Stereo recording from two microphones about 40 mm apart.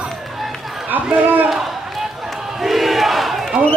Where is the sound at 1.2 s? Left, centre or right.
Right.